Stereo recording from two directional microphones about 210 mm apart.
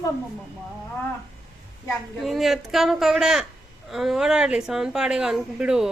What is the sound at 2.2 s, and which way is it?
A woman's voice, centre (ahead or behind).